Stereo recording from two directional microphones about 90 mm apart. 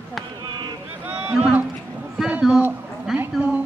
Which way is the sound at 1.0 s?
20° right (ahead or behind).